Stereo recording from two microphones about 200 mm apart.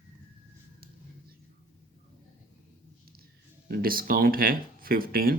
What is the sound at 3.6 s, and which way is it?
Speech, 50° right (ahead or behind).